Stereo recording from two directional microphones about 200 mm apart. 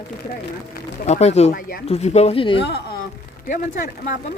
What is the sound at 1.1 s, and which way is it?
Speech, 35° left (ahead or behind).